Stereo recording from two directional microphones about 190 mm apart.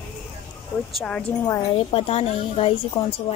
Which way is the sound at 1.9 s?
30° left (ahead or behind).